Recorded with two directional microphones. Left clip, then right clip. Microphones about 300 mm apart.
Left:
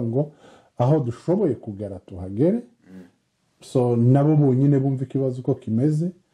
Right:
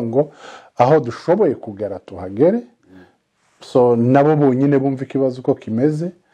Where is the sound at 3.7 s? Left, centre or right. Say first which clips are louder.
Right 8 dB; centre.